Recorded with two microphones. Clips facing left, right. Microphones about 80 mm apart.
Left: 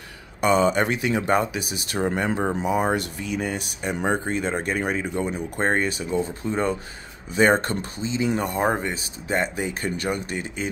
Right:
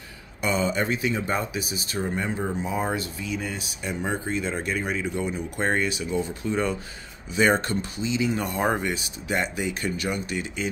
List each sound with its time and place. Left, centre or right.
0.4 s speech: left
8.4 s speech: left